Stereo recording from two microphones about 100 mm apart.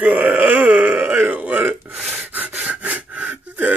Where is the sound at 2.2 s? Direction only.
15° right (ahead or behind).